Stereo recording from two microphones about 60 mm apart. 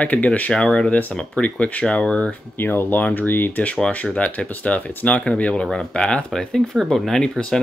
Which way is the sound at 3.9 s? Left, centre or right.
Left.